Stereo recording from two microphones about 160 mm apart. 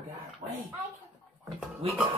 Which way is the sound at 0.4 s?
25° right (ahead or behind).